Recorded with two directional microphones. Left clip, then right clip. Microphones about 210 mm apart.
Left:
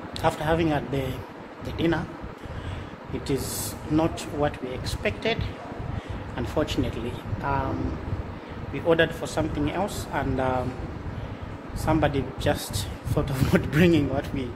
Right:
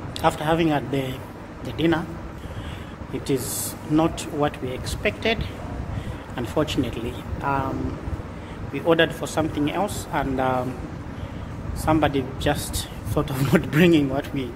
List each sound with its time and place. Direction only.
0.2 s a man's voice: centre (ahead or behind)
3.9 s a man's voice: centre (ahead or behind)
8.7 s a man's voice: centre (ahead or behind)
11.8 s a man's voice: centre (ahead or behind)